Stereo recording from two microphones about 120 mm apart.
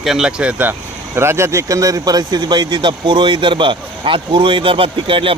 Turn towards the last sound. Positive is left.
turn(degrees=-50)  # may be behind; listen again after turning